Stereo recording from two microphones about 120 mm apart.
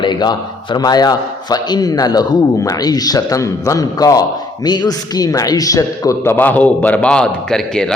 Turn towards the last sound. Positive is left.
turn(degrees=5)  # may be behind; listen again after turning